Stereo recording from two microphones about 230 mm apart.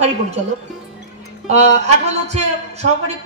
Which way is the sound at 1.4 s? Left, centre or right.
Right.